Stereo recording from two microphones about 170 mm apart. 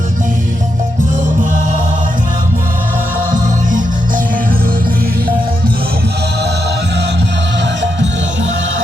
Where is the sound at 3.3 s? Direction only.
50° right (ahead or behind).